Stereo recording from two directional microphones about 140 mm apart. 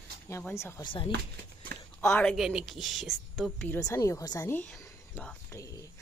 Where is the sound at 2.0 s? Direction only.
10° left (ahead or behind).